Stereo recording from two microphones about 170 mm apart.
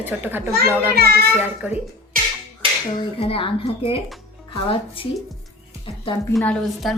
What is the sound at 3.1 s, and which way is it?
A woman's voice, 35° left (ahead or behind).